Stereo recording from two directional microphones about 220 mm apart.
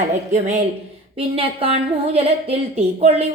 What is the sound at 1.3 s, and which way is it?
A woman's voice, 25° right (ahead or behind).